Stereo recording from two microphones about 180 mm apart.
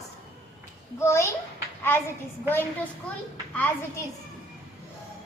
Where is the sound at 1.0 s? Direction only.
15° left (ahead or behind).